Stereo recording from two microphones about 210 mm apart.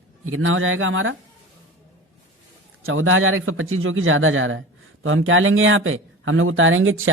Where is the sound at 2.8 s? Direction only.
75° right (ahead or behind).